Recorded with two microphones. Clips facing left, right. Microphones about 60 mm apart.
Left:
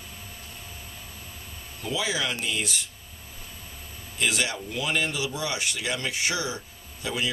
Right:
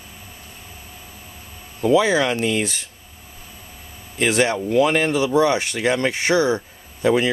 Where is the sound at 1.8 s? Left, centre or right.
Right.